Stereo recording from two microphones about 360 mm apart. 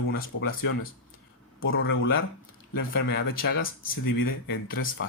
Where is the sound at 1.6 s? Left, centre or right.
Left.